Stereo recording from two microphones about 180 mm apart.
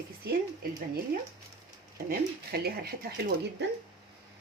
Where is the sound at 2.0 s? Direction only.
60° right (ahead or behind).